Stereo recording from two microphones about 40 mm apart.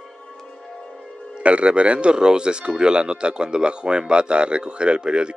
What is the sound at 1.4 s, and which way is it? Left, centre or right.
Speech, right.